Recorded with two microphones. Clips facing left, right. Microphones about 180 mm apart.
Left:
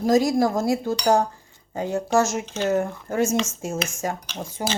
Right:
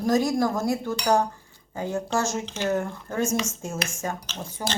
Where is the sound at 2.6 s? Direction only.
25° left (ahead or behind).